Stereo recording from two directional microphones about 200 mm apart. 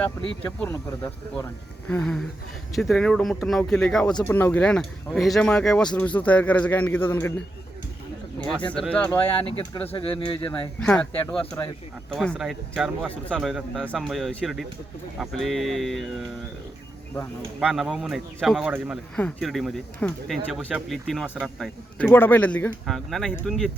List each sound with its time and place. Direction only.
0.4 s speech: 15° left (ahead or behind)
1.9 s speech: 5° left (ahead or behind)
8.4 s speech: 5° left (ahead or behind)
9.9 s speech: 25° left (ahead or behind)
10.8 s speech: 5° left (ahead or behind)
11.6 s speech: 15° left (ahead or behind)
12.1 s speech: 5° left (ahead or behind)
17.6 s speech: 5° right (ahead or behind)